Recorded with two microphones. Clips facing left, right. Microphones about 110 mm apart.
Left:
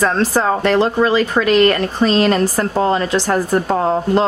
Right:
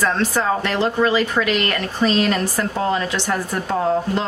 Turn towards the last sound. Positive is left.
turn(degrees=40)  # may be behind; listen again after turning